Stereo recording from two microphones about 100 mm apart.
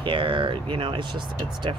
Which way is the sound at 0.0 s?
60° right (ahead or behind).